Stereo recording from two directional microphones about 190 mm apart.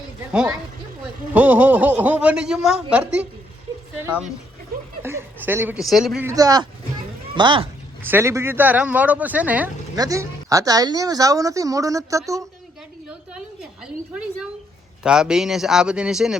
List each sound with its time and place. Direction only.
1.3 s a woman's voice: 10° right (ahead or behind)
6.2 s a man's voice: 20° right (ahead or behind)
8.0 s a woman's voice: 10° right (ahead or behind)
9.9 s a woman's voice: 20° right (ahead or behind)
13.1 s a sound: 5° right (ahead or behind)
15.0 s speech: 5° right (ahead or behind)